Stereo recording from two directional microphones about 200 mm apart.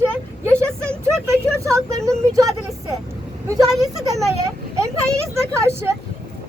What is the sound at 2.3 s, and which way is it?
Speech, 15° right (ahead or behind).